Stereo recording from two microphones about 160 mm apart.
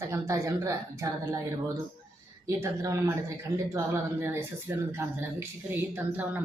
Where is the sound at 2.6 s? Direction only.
20° right (ahead or behind).